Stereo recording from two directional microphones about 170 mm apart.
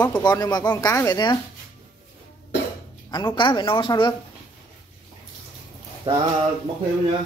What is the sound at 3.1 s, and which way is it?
A woman's voice, 25° left (ahead or behind).